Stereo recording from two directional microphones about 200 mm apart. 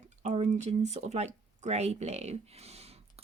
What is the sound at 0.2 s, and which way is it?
Speech, 35° right (ahead or behind).